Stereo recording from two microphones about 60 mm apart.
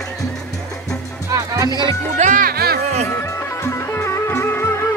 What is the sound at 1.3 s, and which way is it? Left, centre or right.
Music, right.